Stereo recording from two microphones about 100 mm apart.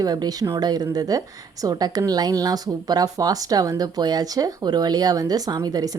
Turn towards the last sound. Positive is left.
turn(degrees=-40)  # may be behind; listen again after turning